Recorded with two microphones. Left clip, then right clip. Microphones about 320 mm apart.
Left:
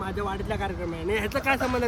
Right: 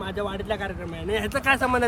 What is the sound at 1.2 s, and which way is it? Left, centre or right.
Speech, right.